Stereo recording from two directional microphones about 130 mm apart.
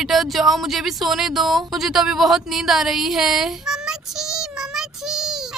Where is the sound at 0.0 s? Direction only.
Centre (ahead or behind).